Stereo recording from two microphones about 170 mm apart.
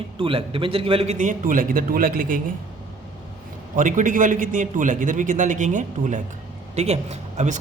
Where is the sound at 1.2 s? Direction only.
50° right (ahead or behind).